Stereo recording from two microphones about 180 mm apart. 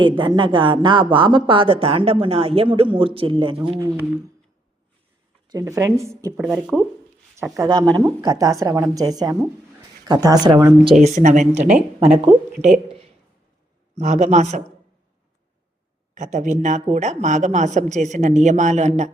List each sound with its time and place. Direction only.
0.0 s speech: 25° right (ahead or behind)
5.5 s speech: 15° right (ahead or behind)
6.5 s speech: 5° right (ahead or behind)
7.5 s speech: 20° right (ahead or behind)
11.0 s speech: 40° right (ahead or behind)
16.1 s speech: 45° right (ahead or behind)